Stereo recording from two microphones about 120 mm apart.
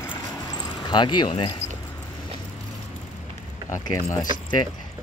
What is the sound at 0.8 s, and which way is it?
Speech, 40° left (ahead or behind).